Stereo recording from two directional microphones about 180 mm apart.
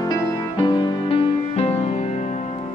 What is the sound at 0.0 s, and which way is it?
Music, 20° left (ahead or behind).